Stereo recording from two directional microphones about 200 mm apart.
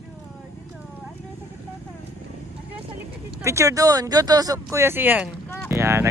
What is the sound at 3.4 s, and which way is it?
Speech, 15° right (ahead or behind).